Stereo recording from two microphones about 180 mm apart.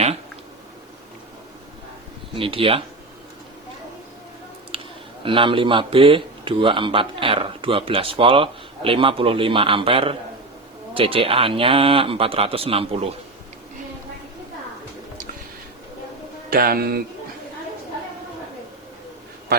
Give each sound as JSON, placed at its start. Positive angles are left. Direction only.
{"t": 2.3, "sound": "speech", "side_deg": -30}
{"t": 4.7, "sound": "a sound", "side_deg": -30}
{"t": 5.2, "sound": "a man's voice", "side_deg": -30}
{"t": 16.5, "sound": "speech", "side_deg": -55}